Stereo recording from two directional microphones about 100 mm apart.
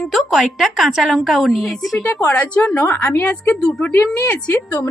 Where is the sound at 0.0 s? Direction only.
Centre (ahead or behind).